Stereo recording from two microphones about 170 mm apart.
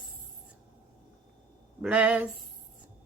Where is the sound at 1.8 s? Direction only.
5° right (ahead or behind).